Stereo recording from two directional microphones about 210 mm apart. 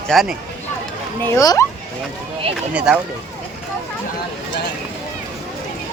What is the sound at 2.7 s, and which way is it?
Speech, 5° right (ahead or behind).